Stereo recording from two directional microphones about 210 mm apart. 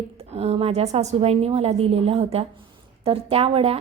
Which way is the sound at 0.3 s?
30° right (ahead or behind).